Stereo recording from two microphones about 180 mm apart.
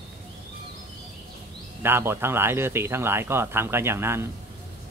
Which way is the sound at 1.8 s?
15° right (ahead or behind).